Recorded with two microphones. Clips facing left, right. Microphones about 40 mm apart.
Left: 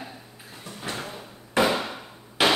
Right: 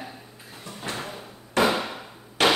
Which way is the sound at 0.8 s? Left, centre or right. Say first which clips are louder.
Even; centre.